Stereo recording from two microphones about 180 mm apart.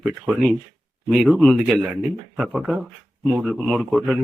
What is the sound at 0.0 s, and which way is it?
Speech, centre (ahead or behind).